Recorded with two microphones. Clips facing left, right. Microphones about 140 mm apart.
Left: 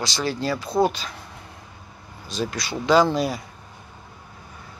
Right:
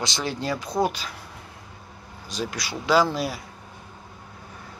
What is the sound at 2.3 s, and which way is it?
Speech, 10° right (ahead or behind).